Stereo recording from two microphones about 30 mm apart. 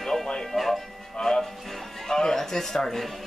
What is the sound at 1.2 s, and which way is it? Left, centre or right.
Speech, centre.